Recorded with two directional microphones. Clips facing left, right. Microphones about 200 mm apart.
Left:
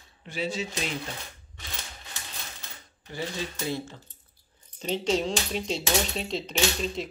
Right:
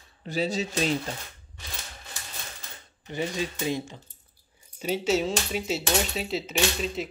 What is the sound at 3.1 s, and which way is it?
Speech, 20° right (ahead or behind).